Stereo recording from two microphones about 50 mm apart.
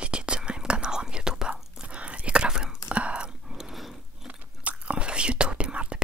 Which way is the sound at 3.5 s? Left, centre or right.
Centre.